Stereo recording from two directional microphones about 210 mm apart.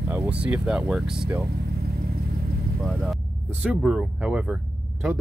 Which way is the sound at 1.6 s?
45° right (ahead or behind).